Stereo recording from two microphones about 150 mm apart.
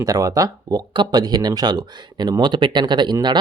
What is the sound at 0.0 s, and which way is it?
Speech, 25° right (ahead or behind).